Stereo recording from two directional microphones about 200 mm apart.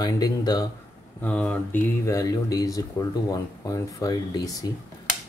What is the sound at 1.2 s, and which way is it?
Speech, 5° left (ahead or behind).